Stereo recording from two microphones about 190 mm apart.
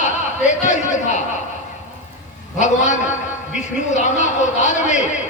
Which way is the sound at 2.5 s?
40° left (ahead or behind).